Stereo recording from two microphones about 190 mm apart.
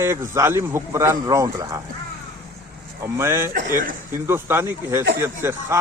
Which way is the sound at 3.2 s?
10° right (ahead or behind).